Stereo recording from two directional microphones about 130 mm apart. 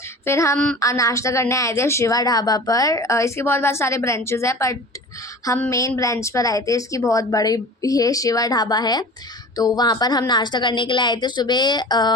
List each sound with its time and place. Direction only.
0.3 s a woman's voice: 20° left (ahead or behind)
0.5 s a sound: 5° left (ahead or behind)
0.8 s a woman's voice: 25° left (ahead or behind)